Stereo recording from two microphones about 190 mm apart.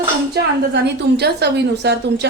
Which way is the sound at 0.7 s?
60° right (ahead or behind).